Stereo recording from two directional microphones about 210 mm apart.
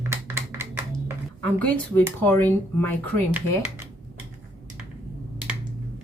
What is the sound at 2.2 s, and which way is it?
Speech, 10° left (ahead or behind).